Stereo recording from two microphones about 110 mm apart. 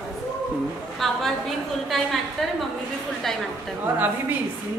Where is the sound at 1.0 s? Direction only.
Centre (ahead or behind).